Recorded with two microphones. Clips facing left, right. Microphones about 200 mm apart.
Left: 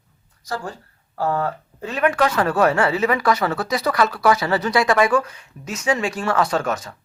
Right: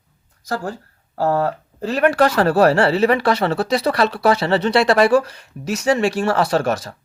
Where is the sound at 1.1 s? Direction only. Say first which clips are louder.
Right 4 dB; 40° right (ahead or behind).